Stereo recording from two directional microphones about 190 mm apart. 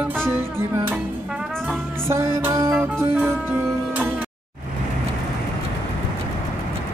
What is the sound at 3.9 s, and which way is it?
Music, 10° right (ahead or behind).